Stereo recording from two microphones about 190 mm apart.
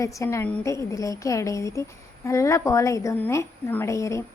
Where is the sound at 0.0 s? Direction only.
15° left (ahead or behind).